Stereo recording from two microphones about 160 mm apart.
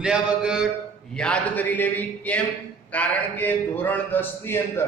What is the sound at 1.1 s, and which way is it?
A man's voice, 5° left (ahead or behind).